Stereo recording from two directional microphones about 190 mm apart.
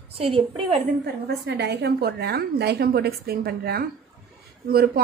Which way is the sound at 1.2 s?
60° right (ahead or behind).